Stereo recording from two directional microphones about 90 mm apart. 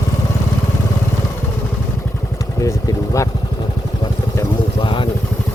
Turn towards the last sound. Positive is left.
turn(degrees=70)  # may be behind; listen again after turning